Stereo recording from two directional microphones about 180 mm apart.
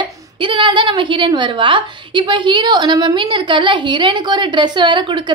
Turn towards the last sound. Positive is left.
turn(degrees=-25)  # may be behind; listen again after turning